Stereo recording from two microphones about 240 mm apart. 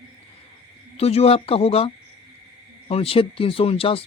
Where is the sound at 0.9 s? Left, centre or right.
Left.